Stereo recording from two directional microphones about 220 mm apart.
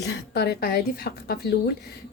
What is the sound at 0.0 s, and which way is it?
Speech, 45° left (ahead or behind).